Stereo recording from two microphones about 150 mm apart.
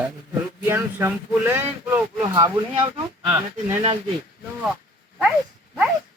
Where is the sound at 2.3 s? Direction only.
35° right (ahead or behind).